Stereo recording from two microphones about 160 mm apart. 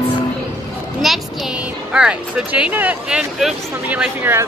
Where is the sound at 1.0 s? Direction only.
Centre (ahead or behind).